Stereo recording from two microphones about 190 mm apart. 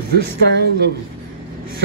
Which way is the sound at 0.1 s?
60° right (ahead or behind).